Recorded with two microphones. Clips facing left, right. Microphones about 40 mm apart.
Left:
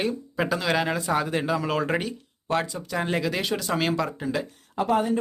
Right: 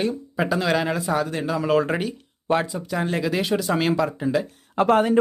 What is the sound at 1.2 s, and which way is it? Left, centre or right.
Speech, centre.